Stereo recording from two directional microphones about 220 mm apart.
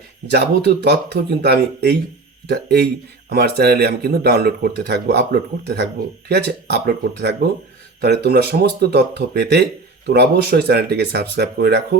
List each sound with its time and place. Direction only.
0.3 s speech: 50° right (ahead or behind)